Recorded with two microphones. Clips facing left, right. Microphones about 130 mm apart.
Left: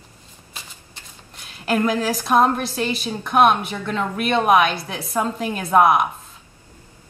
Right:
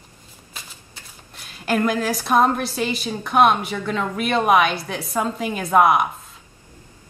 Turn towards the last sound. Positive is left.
turn(degrees=0)  # may be behind; listen again after turning